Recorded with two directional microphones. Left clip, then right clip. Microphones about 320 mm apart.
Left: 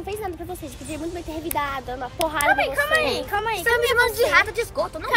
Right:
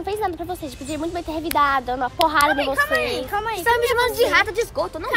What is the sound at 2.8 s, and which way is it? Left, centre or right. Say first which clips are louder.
Speech: even; centre.